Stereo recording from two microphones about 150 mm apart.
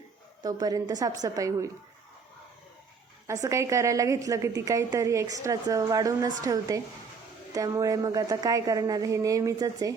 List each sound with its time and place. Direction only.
0.4 s a woman's voice: 25° right (ahead or behind)
3.2 s a woman's voice: 20° right (ahead or behind)